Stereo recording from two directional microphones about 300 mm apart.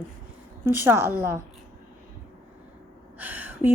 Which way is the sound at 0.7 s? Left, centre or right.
Centre.